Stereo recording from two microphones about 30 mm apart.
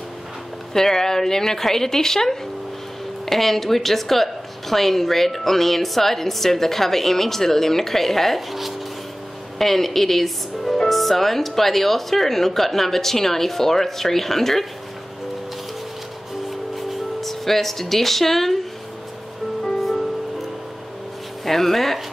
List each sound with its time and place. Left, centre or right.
0.7 s a woman's voice: centre
8.4 s speech: centre
9.6 s a woman's voice: centre
16.4 s music: centre
21.5 s a woman's voice: centre